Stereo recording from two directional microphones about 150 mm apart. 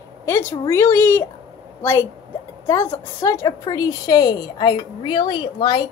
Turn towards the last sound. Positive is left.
turn(degrees=30)  # may be behind; listen again after turning